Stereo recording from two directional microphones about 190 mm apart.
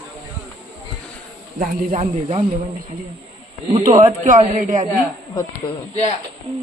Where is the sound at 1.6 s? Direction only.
45° right (ahead or behind).